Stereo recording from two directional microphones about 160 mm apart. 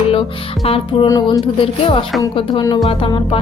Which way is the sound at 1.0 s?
25° left (ahead or behind).